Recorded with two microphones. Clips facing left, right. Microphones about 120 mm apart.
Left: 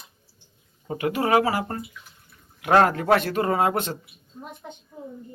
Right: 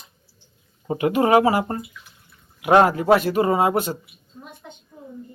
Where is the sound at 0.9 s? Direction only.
20° right (ahead or behind).